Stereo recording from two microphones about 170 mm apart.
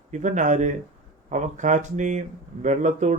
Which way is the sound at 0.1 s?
45° right (ahead or behind).